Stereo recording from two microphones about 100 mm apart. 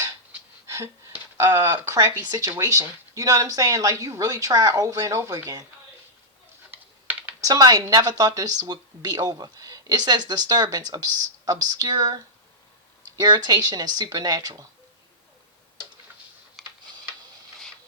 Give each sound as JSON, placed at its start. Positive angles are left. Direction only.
{"t": 0.7, "sound": "speech", "side_deg": -30}
{"t": 6.7, "sound": "a sound", "side_deg": -15}
{"t": 7.4, "sound": "speech", "side_deg": -40}
{"t": 16.6, "sound": "tick-tock", "side_deg": 0}